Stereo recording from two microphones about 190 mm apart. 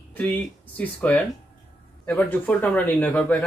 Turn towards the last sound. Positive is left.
turn(degrees=5)  # may be behind; listen again after turning